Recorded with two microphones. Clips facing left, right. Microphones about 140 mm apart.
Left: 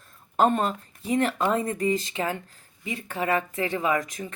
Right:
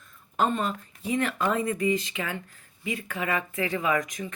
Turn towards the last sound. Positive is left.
turn(degrees=30)  # may be behind; listen again after turning